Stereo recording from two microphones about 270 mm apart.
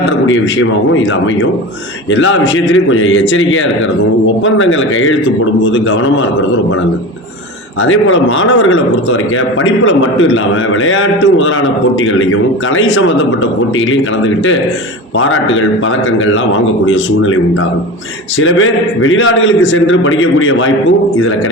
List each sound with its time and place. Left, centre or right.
0.3 s a man's voice: left
7.9 s a man's voice: left
15.2 s a man's voice: left
16.8 s a man's voice: left
18.3 s a man's voice: left